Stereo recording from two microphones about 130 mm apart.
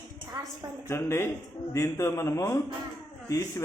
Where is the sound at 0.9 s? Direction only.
20° left (ahead or behind).